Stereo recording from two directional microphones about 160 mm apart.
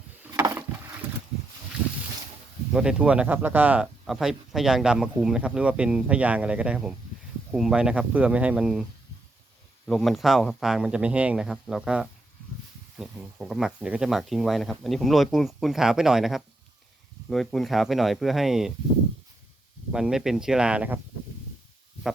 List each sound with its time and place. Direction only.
0.3 s a sound: 25° right (ahead or behind)
2.7 s speech: 5° right (ahead or behind)
19.9 s speech: 5° right (ahead or behind)